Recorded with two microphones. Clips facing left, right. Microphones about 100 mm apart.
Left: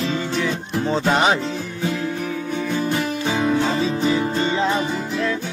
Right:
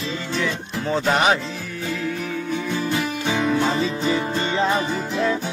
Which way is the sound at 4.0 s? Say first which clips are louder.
Left 2 dB; 5° left (ahead or behind).